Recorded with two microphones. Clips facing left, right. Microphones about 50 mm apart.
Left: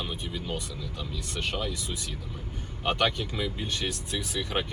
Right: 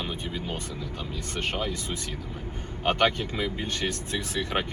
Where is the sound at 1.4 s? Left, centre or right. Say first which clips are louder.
Right 2 dB; right.